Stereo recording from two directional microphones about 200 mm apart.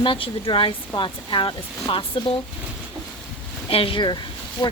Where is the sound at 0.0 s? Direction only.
25° left (ahead or behind).